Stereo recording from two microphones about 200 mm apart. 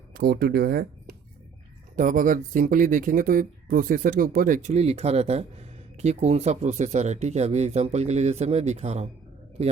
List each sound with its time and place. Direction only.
0.1 s a man's voice: 50° right (ahead or behind); by 9.7 s 30° right (ahead or behind)